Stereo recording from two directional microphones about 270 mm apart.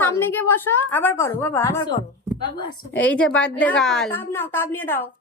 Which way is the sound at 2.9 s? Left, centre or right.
Centre.